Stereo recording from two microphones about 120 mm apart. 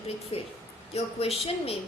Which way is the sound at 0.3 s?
55° left (ahead or behind).